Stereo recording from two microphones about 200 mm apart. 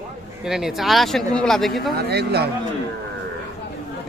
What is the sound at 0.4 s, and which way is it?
Speech, centre (ahead or behind).